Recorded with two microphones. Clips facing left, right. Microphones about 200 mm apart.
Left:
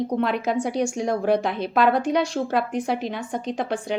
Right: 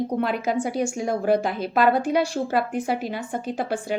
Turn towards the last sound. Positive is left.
turn(degrees=-5)  # may be behind; listen again after turning